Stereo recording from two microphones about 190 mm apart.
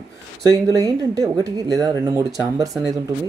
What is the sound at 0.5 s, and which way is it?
Speech, 20° right (ahead or behind).